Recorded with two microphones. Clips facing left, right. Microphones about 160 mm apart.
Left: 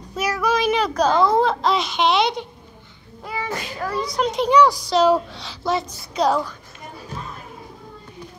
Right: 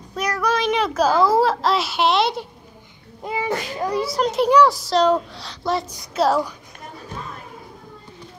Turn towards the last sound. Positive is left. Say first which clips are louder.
# right 1 dB
turn(degrees=-5)  # may be behind; listen again after turning